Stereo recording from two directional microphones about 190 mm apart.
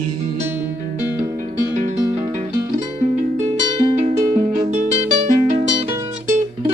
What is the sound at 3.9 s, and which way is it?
Music, 35° right (ahead or behind).